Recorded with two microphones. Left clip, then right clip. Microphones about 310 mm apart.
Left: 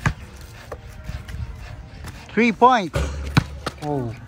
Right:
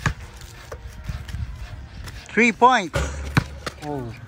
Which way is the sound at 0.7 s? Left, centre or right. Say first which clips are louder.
Left 3 dB; centre.